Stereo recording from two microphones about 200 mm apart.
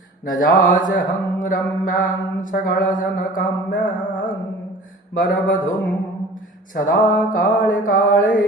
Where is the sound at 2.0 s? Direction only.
40° left (ahead or behind).